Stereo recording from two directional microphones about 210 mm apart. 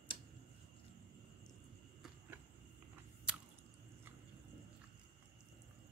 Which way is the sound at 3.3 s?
5° right (ahead or behind).